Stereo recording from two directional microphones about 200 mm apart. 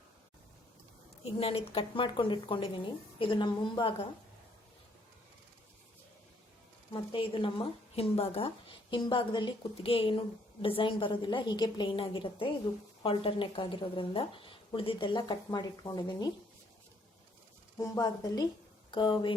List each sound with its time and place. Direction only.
1.4 s speech: 30° left (ahead or behind)
6.9 s speech: 25° left (ahead or behind)
17.7 s a woman's voice: 15° left (ahead or behind)